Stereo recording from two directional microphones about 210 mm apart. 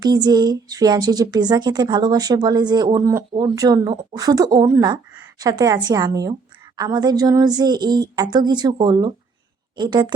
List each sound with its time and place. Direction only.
0.0 s speech: 20° right (ahead or behind)